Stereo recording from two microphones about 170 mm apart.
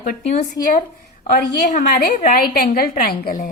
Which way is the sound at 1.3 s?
55° left (ahead or behind).